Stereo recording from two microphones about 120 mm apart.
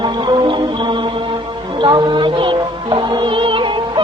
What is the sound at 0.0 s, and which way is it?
Music, 40° right (ahead or behind).